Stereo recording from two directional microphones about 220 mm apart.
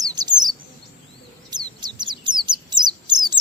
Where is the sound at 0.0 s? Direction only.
20° right (ahead or behind).